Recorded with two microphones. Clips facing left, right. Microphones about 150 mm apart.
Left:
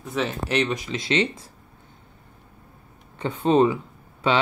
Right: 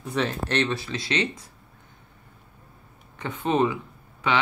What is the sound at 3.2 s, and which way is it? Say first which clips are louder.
Speech: left 5 dB; 30° left (ahead or behind).